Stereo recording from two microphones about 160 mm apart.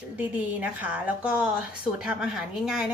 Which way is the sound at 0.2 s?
10° right (ahead or behind).